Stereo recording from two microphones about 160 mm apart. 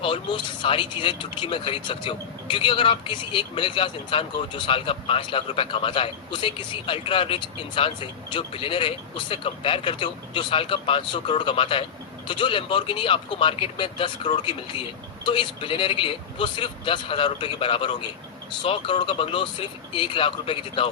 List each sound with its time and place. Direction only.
0.0 s speech: 30° left (ahead or behind)